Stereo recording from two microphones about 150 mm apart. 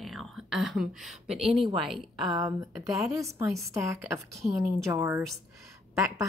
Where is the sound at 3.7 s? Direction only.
20° right (ahead or behind).